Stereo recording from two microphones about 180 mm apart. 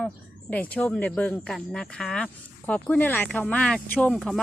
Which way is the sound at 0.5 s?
10° left (ahead or behind).